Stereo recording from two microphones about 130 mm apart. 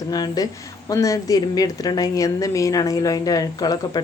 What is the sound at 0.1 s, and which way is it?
A woman's voice, 30° left (ahead or behind).